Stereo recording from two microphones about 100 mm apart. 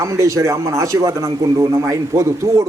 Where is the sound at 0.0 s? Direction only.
30° right (ahead or behind).